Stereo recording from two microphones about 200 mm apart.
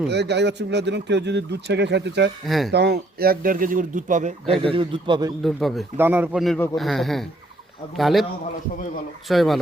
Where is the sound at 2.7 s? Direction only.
55° right (ahead or behind); by 5.3 s 20° right (ahead or behind).